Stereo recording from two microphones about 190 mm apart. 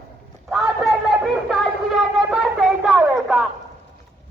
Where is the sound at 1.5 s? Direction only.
Centre (ahead or behind).